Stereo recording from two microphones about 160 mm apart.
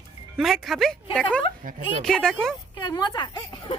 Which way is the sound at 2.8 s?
25° left (ahead or behind).